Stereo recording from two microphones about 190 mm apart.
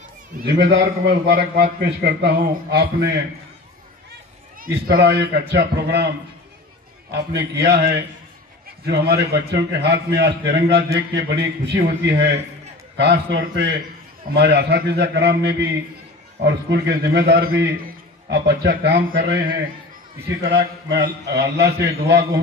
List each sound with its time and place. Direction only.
0.4 s a man's voice: 55° right (ahead or behind)
4.8 s a man's voice: 55° right (ahead or behind)
7.1 s a man's voice: 60° right (ahead or behind)
20.5 s a man's voice: 60° right (ahead or behind)